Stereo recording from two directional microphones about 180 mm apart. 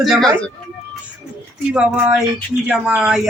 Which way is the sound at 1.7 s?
5° right (ahead or behind).